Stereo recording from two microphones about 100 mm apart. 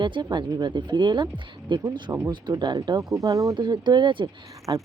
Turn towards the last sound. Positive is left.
turn(degrees=-50)  # may be behind; listen again after turning